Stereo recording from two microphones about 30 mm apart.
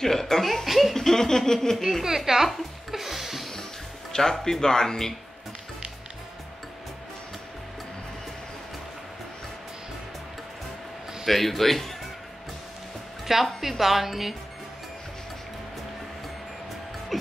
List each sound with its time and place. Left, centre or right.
0.0 s speech: centre
0.7 s speech: centre
0.9 s speech: centre
2.0 s a sound: centre
4.1 s speech: centre
11.2 s speech: centre
13.6 s speech: centre
17.1 s music: centre